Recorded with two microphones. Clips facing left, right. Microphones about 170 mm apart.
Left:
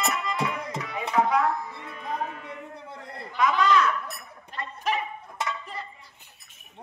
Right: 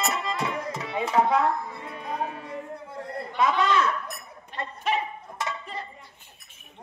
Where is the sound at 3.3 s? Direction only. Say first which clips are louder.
Left 1 dB; 25° right (ahead or behind).